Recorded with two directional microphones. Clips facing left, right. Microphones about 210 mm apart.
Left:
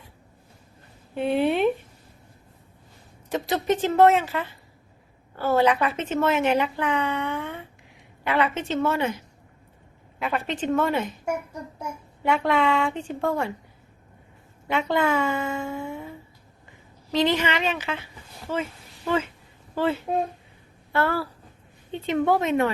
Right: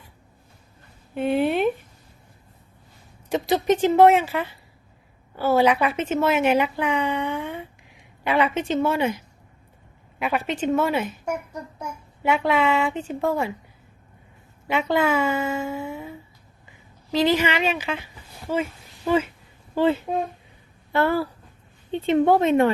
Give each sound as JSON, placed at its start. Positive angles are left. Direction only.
{"t": 1.1, "sound": "speech", "side_deg": 0}
{"t": 3.2, "sound": "a woman's voice", "side_deg": -15}
{"t": 10.2, "sound": "a woman's voice", "side_deg": -10}
{"t": 12.2, "sound": "a woman's voice", "side_deg": -5}
{"t": 14.7, "sound": "speech", "side_deg": -5}
{"t": 17.1, "sound": "a woman's voice", "side_deg": -5}
{"t": 19.7, "sound": "speech", "side_deg": -20}